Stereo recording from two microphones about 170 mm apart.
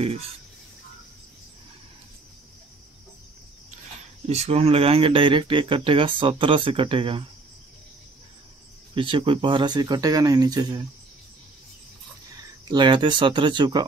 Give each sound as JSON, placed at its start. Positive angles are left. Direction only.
{"t": 4.3, "sound": "speech", "side_deg": -40}
{"t": 8.9, "sound": "speech", "side_deg": -30}
{"t": 12.6, "sound": "speech", "side_deg": -25}